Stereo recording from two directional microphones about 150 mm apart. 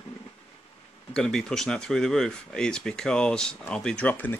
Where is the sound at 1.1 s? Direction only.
5° left (ahead or behind).